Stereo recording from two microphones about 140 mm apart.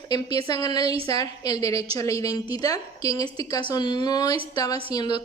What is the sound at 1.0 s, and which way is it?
Speech, 25° left (ahead or behind).